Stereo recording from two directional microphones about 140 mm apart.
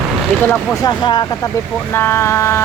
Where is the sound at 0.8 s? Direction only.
30° left (ahead or behind).